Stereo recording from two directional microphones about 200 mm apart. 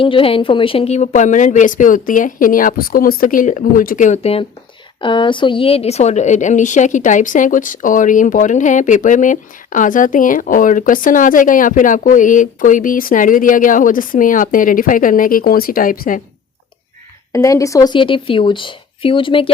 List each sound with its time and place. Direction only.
0.0 s a woman's voice: 25° left (ahead or behind); by 16.2 s 45° left (ahead or behind)
17.3 s speech: 15° left (ahead or behind)